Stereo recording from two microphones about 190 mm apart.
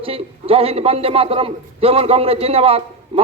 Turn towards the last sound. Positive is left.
turn(degrees=-30)  # may be behind; listen again after turning